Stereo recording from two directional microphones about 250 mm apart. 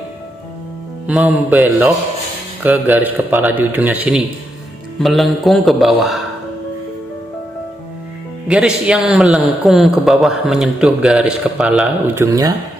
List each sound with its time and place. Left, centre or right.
1.0 s a man's voice: centre
8.5 s a man's voice: centre